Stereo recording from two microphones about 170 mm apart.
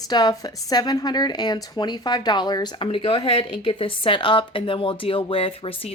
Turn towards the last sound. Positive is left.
turn(degrees=35)  # may be behind; listen again after turning